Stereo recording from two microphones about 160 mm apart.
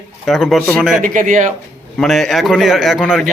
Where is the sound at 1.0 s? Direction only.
55° right (ahead or behind).